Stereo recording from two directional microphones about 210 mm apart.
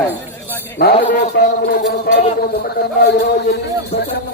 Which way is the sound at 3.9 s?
35° left (ahead or behind).